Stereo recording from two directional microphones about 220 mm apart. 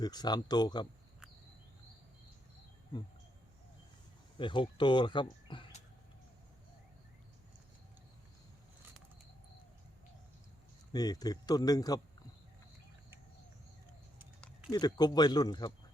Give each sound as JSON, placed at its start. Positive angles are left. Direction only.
{"t": 0.0, "sound": "speech", "side_deg": 20}
{"t": 4.4, "sound": "speech", "side_deg": 20}
{"t": 10.9, "sound": "speech", "side_deg": 15}
{"t": 14.7, "sound": "speech", "side_deg": 20}